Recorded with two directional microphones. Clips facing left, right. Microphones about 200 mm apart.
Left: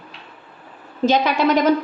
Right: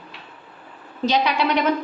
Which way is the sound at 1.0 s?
50° left (ahead or behind).